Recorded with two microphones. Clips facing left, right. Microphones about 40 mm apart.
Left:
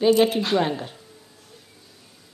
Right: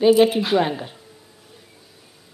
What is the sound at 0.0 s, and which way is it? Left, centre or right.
A woman's voice, centre.